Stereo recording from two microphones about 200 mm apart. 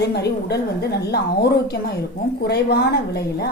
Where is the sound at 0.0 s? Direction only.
55° left (ahead or behind).